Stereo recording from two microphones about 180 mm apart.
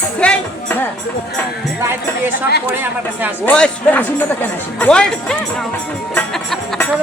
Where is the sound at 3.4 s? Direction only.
5° left (ahead or behind).